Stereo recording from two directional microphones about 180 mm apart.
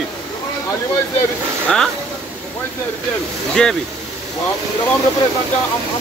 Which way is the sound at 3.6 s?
5° left (ahead or behind).